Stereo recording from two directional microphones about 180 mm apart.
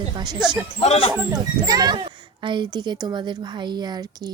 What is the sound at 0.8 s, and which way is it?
Speech, 35° left (ahead or behind).